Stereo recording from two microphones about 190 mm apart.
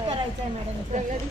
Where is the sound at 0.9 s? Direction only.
40° right (ahead or behind).